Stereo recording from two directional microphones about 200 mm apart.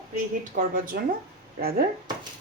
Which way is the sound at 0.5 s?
45° right (ahead or behind).